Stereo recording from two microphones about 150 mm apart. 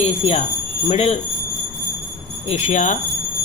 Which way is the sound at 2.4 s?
45° left (ahead or behind).